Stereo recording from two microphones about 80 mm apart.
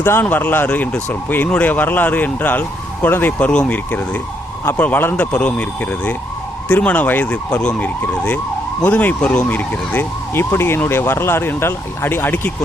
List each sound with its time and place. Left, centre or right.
0.0 s speech: left
3.5 s speech: centre
4.8 s speech: left